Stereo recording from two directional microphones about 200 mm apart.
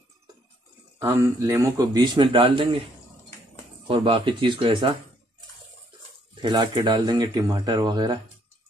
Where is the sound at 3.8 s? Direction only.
25° right (ahead or behind).